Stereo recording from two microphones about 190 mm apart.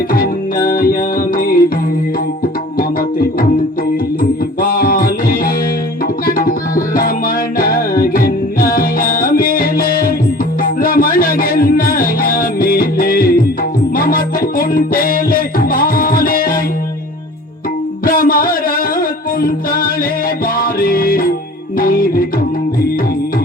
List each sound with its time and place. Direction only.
0.1 s music: 50° left (ahead or behind)
4.2 s music: 50° left (ahead or behind)
18.0 s music: 50° left (ahead or behind)